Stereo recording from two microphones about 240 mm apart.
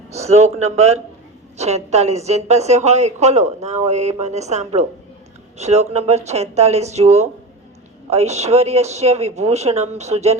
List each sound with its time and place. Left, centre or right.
0.1 s a woman's voice: right